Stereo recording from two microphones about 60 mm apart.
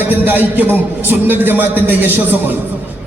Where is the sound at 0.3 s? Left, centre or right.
Right.